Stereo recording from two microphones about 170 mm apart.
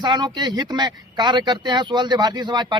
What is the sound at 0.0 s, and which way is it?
Speech, 25° right (ahead or behind).